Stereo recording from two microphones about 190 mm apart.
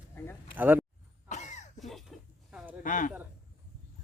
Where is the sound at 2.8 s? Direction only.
45° left (ahead or behind).